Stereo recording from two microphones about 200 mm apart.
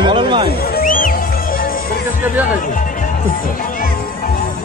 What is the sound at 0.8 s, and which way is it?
Music, 45° left (ahead or behind).